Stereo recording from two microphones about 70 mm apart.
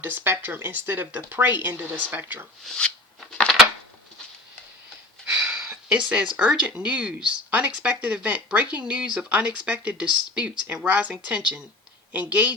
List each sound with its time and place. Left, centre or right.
0.0 s speech: right
2.6 s a sound: centre
5.2 s speech: centre